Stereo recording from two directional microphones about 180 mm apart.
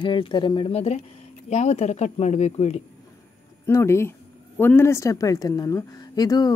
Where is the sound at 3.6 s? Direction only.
15° left (ahead or behind).